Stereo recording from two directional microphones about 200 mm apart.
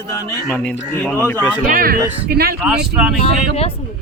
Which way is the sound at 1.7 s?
45° right (ahead or behind).